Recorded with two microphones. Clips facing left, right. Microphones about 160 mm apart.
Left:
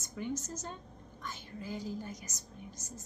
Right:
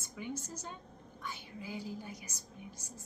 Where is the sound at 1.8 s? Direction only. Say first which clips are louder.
Left 3 dB; 45° left (ahead or behind).